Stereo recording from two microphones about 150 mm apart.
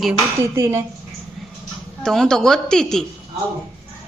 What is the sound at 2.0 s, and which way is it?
A man's voice, centre (ahead or behind).